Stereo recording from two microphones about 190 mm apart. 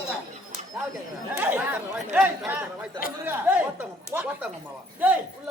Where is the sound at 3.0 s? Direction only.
50° left (ahead or behind).